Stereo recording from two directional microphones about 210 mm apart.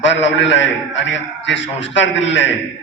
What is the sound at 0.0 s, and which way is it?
A man's voice, 60° left (ahead or behind).